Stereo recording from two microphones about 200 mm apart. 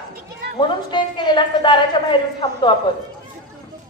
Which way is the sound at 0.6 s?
25° left (ahead or behind).